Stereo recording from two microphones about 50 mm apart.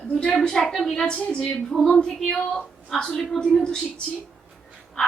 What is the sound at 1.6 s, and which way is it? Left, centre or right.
A woman's voice, centre.